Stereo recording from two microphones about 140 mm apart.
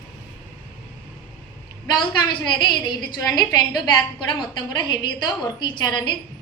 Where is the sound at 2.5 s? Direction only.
30° left (ahead or behind).